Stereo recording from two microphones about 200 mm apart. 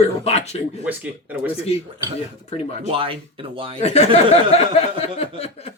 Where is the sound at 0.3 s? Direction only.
30° left (ahead or behind).